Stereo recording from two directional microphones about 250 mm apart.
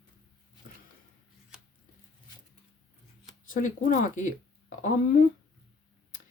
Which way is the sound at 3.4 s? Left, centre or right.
Left.